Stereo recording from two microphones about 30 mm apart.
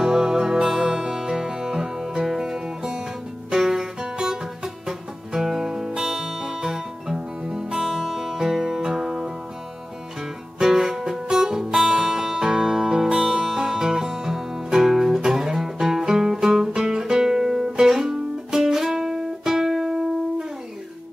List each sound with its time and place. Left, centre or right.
0.0 s music: centre
10.6 s music: centre
13.2 s music: centre